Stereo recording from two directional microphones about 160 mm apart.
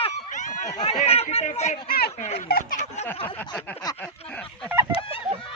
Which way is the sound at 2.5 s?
50° left (ahead or behind).